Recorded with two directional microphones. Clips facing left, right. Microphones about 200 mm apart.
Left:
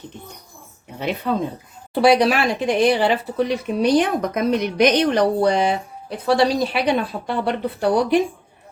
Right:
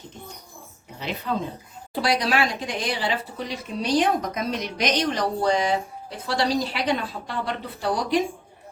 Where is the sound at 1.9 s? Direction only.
65° left (ahead or behind).